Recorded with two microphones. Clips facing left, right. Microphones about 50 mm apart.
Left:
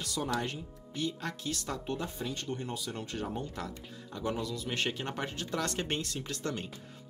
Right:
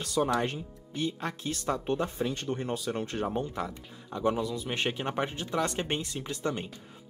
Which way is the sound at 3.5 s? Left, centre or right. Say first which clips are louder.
Right 5 dB; right.